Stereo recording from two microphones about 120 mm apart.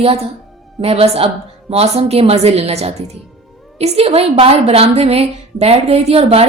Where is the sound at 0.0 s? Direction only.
55° right (ahead or behind).